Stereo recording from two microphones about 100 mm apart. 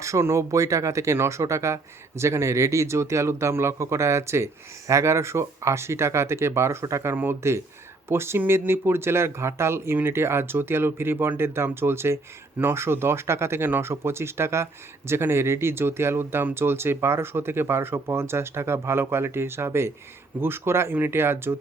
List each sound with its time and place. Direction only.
0.0 s speech: 30° right (ahead or behind)